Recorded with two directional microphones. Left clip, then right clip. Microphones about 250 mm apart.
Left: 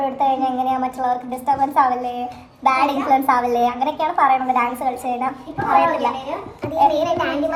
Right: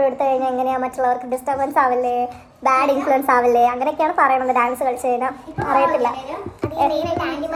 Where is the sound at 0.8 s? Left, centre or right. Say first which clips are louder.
Right 1 dB; right.